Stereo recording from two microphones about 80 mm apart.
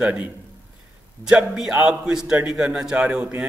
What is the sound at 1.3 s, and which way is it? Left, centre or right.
A man's voice, centre.